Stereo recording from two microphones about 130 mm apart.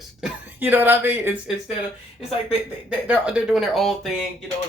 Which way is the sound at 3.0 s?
10° right (ahead or behind).